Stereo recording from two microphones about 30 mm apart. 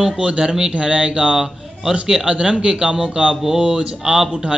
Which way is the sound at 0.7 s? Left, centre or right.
Right.